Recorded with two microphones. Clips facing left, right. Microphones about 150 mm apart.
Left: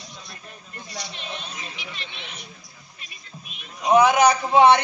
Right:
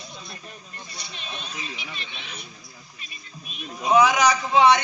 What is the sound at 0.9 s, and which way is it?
Speech, 90° left.